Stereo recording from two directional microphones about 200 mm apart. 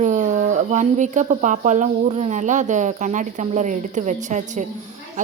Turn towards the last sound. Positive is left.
turn(degrees=-40)  # may be behind; listen again after turning